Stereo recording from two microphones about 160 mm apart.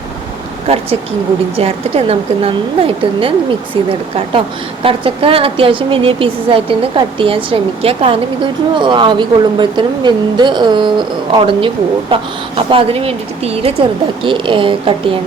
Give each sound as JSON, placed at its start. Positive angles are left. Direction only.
{"t": 0.7, "sound": "a woman's voice", "side_deg": -40}